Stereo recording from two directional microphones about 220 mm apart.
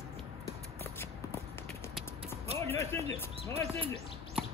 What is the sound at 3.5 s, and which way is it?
Speech, 25° right (ahead or behind).